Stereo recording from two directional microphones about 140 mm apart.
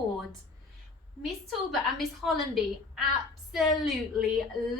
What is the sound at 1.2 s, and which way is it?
A woman's voice, centre (ahead or behind).